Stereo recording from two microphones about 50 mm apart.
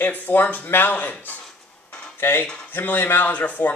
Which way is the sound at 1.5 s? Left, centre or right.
Centre.